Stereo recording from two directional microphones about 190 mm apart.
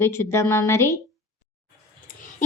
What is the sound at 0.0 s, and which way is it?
Speech, 15° left (ahead or behind).